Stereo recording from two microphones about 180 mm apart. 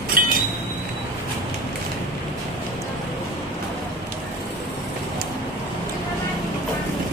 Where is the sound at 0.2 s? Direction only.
55° right (ahead or behind).